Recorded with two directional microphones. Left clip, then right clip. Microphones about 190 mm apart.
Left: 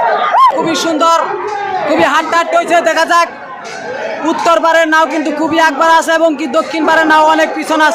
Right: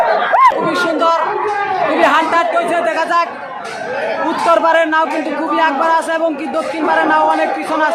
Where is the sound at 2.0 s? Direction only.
30° left (ahead or behind).